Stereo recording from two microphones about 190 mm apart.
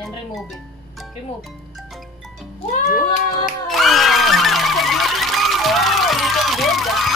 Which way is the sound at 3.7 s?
Centre (ahead or behind).